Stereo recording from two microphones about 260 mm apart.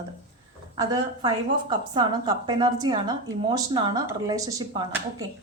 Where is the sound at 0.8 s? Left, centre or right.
Centre.